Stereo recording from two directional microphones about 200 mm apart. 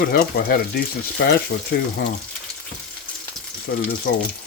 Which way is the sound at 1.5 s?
50° left (ahead or behind).